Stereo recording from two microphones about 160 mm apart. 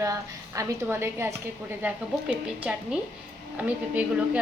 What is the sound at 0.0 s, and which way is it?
A woman's voice, 20° right (ahead or behind).